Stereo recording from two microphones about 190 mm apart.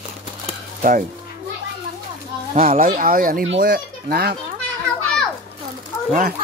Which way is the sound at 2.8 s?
45° right (ahead or behind).